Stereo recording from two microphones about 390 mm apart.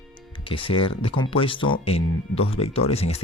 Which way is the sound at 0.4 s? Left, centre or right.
Centre.